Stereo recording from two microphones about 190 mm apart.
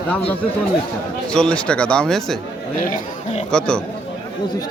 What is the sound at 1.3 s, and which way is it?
Speech, 5° left (ahead or behind).